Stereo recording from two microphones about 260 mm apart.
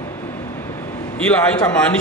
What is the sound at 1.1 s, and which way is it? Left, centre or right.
Speech, centre.